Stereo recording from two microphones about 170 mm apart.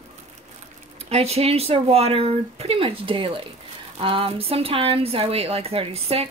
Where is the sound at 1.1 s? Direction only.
35° right (ahead or behind).